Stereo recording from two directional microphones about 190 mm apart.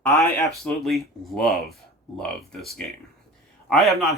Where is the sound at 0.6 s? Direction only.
Centre (ahead or behind).